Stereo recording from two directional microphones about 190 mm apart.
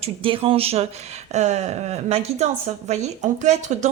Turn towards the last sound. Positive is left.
turn(degrees=-40)  # may be behind; listen again after turning